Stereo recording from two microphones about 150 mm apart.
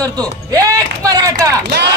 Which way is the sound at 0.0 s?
25° right (ahead or behind).